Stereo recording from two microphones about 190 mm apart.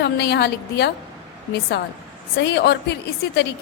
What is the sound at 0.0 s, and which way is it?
Speech, 60° left (ahead or behind).